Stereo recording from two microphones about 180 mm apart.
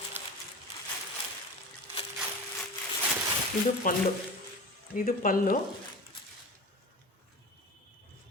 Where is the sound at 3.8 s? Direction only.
50° left (ahead or behind).